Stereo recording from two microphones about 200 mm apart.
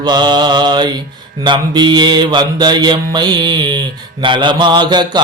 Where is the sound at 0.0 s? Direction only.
20° right (ahead or behind).